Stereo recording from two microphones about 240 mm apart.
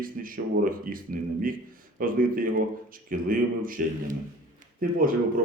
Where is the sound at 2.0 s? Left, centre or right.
Right.